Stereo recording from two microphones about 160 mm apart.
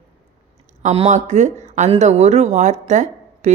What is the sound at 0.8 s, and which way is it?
A woman's voice, 45° right (ahead or behind).